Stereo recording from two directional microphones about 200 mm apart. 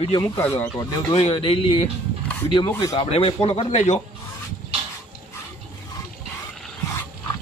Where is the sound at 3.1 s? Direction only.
30° left (ahead or behind).